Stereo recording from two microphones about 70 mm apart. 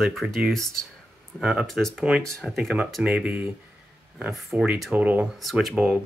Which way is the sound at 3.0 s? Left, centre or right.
Centre.